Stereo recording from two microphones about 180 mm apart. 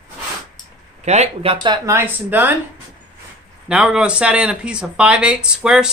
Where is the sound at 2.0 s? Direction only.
10° right (ahead or behind).